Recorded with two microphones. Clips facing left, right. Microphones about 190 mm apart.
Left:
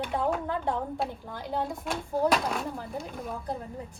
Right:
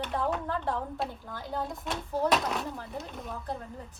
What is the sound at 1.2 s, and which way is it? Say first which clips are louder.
Speech: left 3 dB; 15° left (ahead or behind).